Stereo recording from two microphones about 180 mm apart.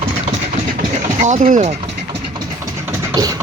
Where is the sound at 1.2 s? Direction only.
45° right (ahead or behind).